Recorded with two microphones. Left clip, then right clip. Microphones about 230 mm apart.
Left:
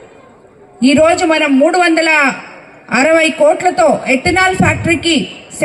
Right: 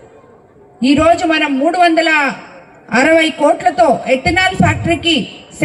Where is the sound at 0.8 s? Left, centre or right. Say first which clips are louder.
Left 1 dB; left.